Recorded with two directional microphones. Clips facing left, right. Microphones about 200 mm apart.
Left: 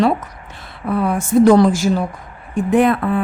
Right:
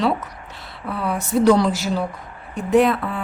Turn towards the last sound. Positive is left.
turn(degrees=50)  # may be behind; listen again after turning